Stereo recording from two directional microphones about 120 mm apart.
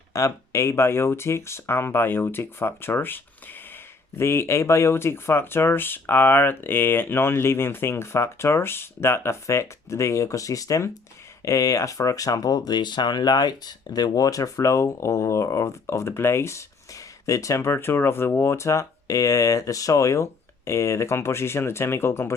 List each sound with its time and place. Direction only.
0.1 s speech: 25° left (ahead or behind)